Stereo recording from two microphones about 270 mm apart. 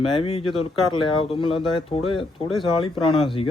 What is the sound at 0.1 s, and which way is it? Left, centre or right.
Speech, centre.